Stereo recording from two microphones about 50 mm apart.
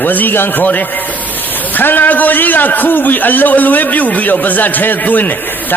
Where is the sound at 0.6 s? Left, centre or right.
Left.